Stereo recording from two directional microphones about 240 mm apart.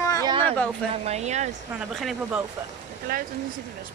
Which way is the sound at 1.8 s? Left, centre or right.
Centre.